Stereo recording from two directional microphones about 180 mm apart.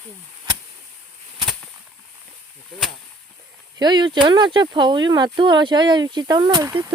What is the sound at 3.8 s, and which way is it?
Speech, 25° right (ahead or behind).